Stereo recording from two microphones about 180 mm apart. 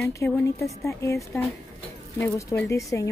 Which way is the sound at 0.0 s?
15° left (ahead or behind).